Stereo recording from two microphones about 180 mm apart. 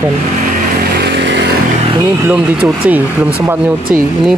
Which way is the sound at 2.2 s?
10° right (ahead or behind).